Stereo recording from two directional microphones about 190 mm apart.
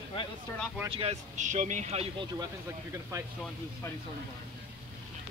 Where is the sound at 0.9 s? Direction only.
30° right (ahead or behind).